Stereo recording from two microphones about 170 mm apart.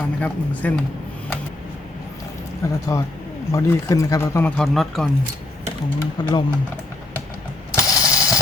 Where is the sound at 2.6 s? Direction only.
15° left (ahead or behind).